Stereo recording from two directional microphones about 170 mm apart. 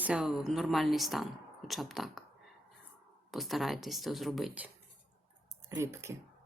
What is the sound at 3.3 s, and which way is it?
Speech, centre (ahead or behind).